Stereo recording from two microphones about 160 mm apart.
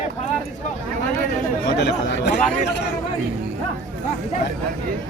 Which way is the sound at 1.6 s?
90° left.